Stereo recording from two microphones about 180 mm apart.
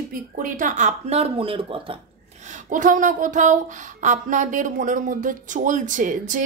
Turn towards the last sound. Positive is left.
turn(degrees=-45)  # may be behind; listen again after turning